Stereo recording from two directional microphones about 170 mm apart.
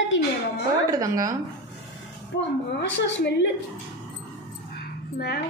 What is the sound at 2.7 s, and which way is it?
Speech, 90° left.